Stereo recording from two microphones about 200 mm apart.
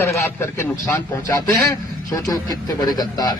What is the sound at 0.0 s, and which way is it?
Speech, 15° left (ahead or behind).